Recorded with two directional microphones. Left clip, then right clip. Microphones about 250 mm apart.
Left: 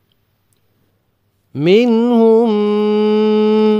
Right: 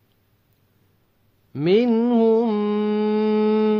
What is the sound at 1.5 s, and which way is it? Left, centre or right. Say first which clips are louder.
Mantra: left 7 dB; left.